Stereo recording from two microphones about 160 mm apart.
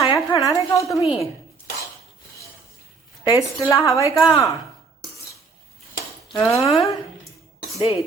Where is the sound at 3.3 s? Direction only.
20° left (ahead or behind).